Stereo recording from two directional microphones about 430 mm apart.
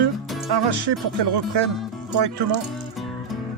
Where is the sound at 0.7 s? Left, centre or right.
Right.